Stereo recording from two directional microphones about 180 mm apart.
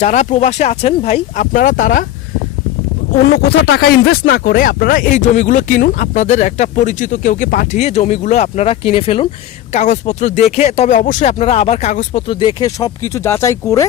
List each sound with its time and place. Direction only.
0.0 s speech: 40° left (ahead or behind)
1.4 s speech: 45° left (ahead or behind)
3.5 s speech: 65° left (ahead or behind); by 7.8 s 50° left (ahead or behind)
7.8 s speech: 35° left (ahead or behind)
9.7 s speech: 40° left (ahead or behind)
12.4 s speech: 25° left (ahead or behind)